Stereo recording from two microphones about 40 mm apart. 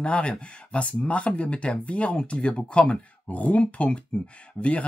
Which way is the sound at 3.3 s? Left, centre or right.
Left.